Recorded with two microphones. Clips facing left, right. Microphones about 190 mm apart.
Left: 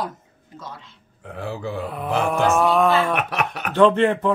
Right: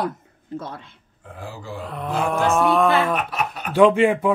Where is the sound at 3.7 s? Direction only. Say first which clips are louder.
Right 1 dB; 10° right (ahead or behind).